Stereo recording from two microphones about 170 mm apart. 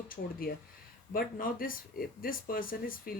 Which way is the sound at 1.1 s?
55° left (ahead or behind).